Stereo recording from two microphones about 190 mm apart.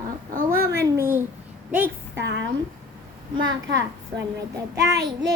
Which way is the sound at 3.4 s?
65° right (ahead or behind).